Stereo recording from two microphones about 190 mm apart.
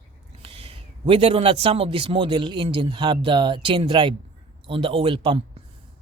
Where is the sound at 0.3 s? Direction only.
30° right (ahead or behind).